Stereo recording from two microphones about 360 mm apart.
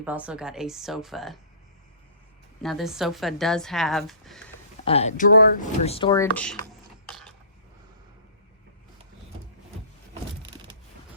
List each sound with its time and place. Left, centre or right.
0.0 s a woman's voice: centre
2.6 s a woman's voice: centre
4.9 s speech: centre
7.0 s a sound: centre